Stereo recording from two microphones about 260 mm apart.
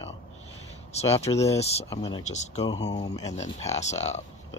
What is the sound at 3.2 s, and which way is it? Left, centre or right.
Speech, left.